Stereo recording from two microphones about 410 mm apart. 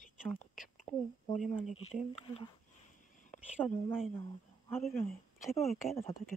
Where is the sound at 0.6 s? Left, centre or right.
Centre.